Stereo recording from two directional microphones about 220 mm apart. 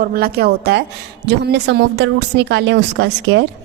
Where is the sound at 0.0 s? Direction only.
45° right (ahead or behind).